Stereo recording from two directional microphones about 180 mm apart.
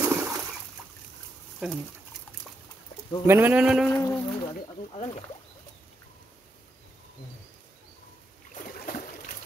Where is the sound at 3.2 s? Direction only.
10° right (ahead or behind).